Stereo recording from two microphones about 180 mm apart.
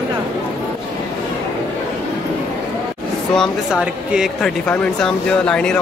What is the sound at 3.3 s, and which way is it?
Speech, centre (ahead or behind).